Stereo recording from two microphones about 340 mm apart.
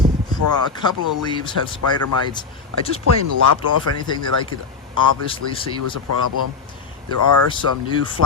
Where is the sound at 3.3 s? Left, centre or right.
Right.